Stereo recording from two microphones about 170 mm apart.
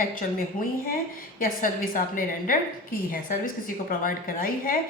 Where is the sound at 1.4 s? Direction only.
55° left (ahead or behind).